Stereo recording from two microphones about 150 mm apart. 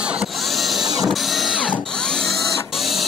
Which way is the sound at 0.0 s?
5° right (ahead or behind).